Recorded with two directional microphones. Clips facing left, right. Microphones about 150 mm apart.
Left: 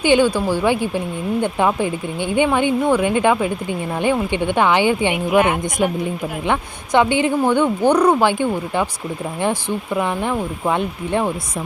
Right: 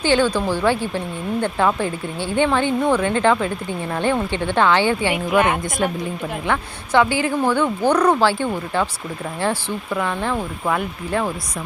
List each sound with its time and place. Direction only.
0.0 s speech: 15° left (ahead or behind)